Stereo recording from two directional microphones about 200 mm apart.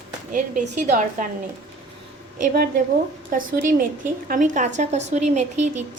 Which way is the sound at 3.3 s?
45° right (ahead or behind).